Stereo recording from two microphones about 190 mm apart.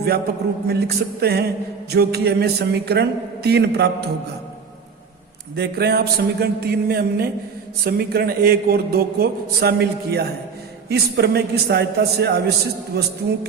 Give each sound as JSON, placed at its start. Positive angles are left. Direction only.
{"t": 0.7, "sound": "a man's voice", "side_deg": -60}
{"t": 5.5, "sound": "a man's voice", "side_deg": -55}